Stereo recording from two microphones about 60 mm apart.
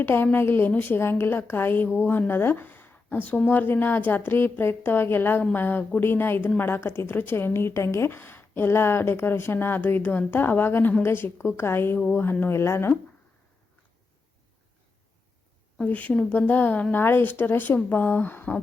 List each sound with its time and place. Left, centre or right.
0.0 s a woman's voice: left
0.9 s a woman's voice: left
15.8 s speech: left
16.9 s a woman's voice: left